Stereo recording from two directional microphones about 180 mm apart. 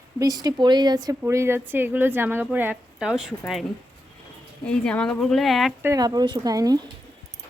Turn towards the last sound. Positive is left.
turn(degrees=-20)  # may be behind; listen again after turning